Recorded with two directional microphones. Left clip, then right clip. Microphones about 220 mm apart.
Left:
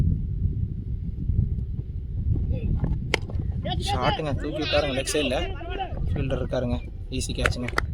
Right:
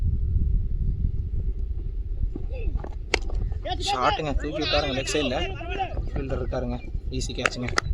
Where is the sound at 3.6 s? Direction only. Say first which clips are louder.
Right 2 dB; centre (ahead or behind).